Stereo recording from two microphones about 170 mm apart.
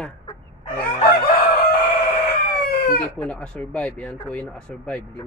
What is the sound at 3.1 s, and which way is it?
Speech, 5° left (ahead or behind).